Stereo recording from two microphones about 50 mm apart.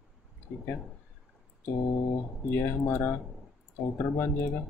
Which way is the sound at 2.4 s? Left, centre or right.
Left.